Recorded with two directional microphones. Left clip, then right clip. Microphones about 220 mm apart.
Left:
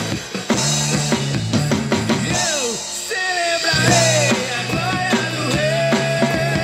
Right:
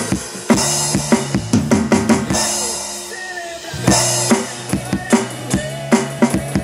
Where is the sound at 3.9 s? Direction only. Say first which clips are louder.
Right 2 dB; 45° right (ahead or behind).